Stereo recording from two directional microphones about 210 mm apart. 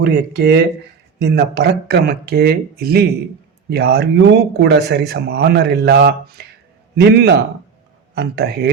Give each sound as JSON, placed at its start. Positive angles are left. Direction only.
{"t": 0.0, "sound": "speech", "side_deg": -50}